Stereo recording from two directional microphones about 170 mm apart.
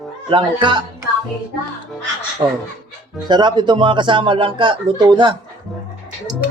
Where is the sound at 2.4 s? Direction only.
30° right (ahead or behind).